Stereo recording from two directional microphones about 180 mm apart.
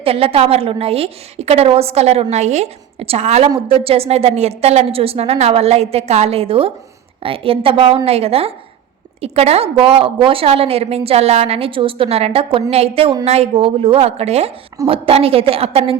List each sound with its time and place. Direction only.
0.0 s a woman's voice: 30° right (ahead or behind)